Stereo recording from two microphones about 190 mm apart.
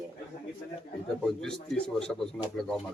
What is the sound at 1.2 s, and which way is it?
A man's voice, centre (ahead or behind).